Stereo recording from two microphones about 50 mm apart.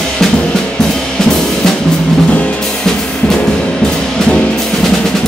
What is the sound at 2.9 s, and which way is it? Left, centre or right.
Drum kit, centre.